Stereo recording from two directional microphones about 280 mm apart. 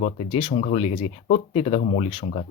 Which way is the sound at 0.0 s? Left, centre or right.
Left.